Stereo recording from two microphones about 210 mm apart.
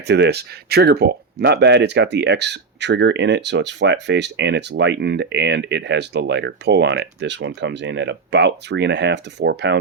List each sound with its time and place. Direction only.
0.1 s speech: 50° right (ahead or behind)